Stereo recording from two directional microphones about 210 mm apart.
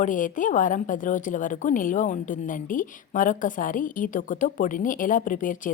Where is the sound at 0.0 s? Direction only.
40° left (ahead or behind).